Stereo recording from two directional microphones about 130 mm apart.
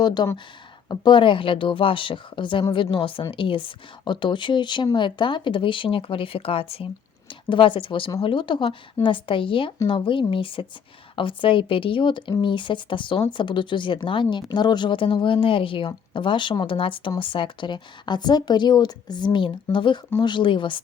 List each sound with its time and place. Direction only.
0.0 s speech: 35° left (ahead or behind)